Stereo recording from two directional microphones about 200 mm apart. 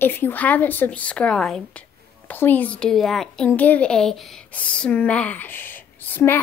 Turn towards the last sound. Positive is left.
turn(degrees=10)  # may be behind; listen again after turning